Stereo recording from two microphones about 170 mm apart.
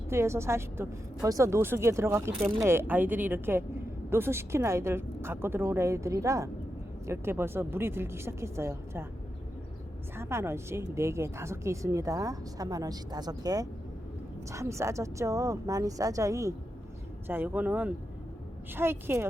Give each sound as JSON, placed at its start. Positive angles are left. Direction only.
{"t": 0.1, "sound": "a woman's voice", "side_deg": -15}
{"t": 10.2, "sound": "a woman's voice", "side_deg": -15}